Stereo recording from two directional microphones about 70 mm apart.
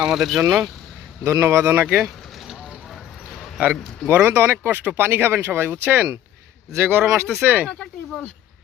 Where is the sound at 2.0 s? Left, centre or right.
Centre.